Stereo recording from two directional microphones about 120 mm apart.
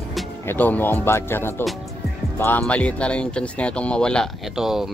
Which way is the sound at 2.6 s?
10° left (ahead or behind).